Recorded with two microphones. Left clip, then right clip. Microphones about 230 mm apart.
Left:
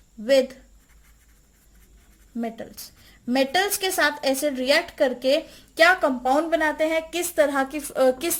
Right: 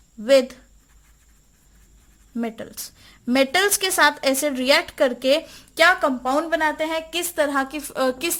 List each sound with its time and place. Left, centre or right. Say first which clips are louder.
0.2 s a woman's voice: right 3 dB; right
2.3 s a woman's voice: right 2 dB; right